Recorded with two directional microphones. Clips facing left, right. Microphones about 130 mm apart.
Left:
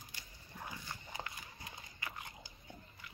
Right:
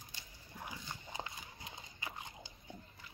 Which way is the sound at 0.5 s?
15° right (ahead or behind).